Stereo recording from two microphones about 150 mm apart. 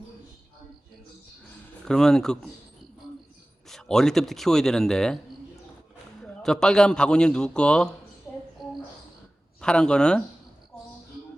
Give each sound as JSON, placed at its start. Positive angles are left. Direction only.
{"t": 1.8, "sound": "a man's voice", "side_deg": 5}
{"t": 3.7, "sound": "a man's voice", "side_deg": 5}
{"t": 6.2, "sound": "a man's voice", "side_deg": 5}
{"t": 8.3, "sound": "a sound", "side_deg": 15}
{"t": 9.6, "sound": "a man's voice", "side_deg": 5}